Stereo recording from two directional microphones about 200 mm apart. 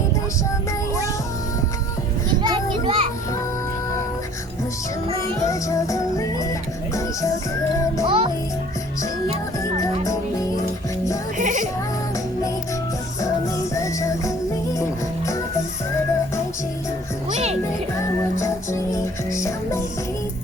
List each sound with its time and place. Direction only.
2.4 s children playing: 25° right (ahead or behind)
5.4 s music: 15° left (ahead or behind)
8.0 s music: 25° right (ahead or behind)
11.3 s music: 40° right (ahead or behind)
13.7 s music: 15° left (ahead or behind)
17.9 s music: 15° left (ahead or behind)